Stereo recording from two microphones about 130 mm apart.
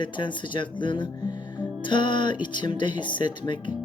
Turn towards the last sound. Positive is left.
turn(degrees=35)  # may be behind; listen again after turning